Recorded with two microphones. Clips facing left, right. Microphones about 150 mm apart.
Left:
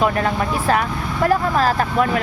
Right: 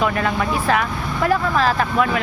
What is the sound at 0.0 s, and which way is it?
Speech, 35° left (ahead or behind).